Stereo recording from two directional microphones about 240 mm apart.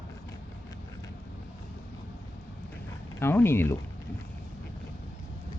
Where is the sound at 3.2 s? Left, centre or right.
Centre.